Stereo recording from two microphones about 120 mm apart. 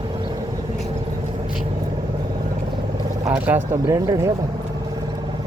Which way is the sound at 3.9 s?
25° right (ahead or behind).